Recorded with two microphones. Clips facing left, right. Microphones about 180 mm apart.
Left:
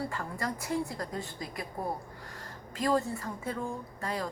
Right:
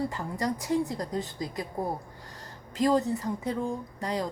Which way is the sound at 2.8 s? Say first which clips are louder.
Right 4 dB; 20° right (ahead or behind).